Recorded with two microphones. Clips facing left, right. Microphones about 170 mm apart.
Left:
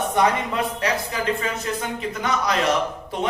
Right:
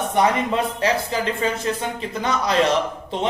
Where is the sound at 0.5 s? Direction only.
30° right (ahead or behind).